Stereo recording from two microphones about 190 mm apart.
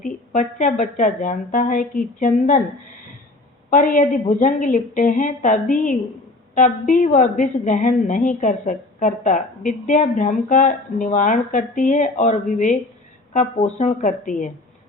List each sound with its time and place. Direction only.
0.0 s a woman's voice: 40° left (ahead or behind)
3.7 s a woman's voice: 45° left (ahead or behind)